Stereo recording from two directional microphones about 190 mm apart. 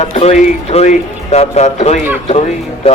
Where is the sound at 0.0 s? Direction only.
35° left (ahead or behind).